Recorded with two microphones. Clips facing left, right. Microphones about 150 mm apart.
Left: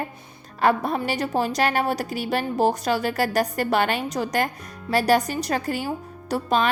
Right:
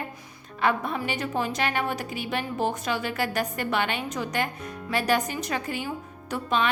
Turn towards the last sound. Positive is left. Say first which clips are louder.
# left 4 dB
turn(degrees=35)  # may be behind; listen again after turning